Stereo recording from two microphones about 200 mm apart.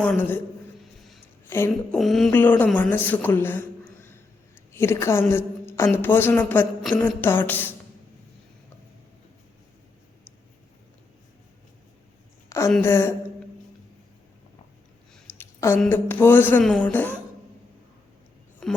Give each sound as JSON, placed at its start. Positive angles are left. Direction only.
{"t": 0.0, "sound": "a man's voice", "side_deg": 10}
{"t": 1.5, "sound": "a man's voice", "side_deg": 10}
{"t": 2.0, "sound": "a man's voice", "side_deg": 0}
{"t": 12.5, "sound": "a sound", "side_deg": 15}
{"t": 12.7, "sound": "a man's voice", "side_deg": 10}
{"t": 15.1, "sound": "speech", "side_deg": 10}
{"t": 18.6, "sound": "a sound", "side_deg": 0}